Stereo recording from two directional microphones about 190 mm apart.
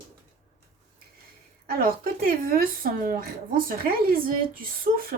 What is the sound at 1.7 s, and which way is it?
Speech, 50° right (ahead or behind).